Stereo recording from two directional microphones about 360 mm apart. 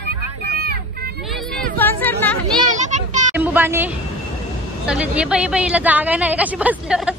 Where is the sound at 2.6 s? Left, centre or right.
Centre.